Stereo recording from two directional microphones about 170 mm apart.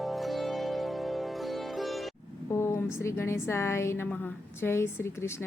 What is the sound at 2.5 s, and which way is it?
A woman's voice, 15° left (ahead or behind).